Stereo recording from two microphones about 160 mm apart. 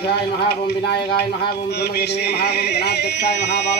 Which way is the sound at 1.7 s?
90° left.